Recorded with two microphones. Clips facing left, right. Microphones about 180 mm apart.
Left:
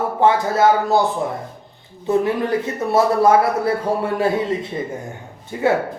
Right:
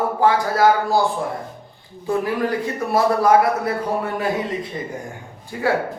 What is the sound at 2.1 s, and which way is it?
Speech, 25° left (ahead or behind).